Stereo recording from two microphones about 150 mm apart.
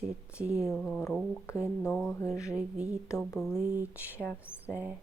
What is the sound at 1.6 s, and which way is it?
Speech, 20° left (ahead or behind).